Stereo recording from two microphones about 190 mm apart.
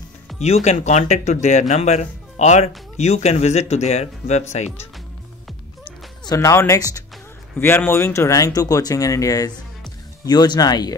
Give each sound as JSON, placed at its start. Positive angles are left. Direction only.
{"t": 0.4, "sound": "speech", "side_deg": 35}
{"t": 6.2, "sound": "speech", "side_deg": 15}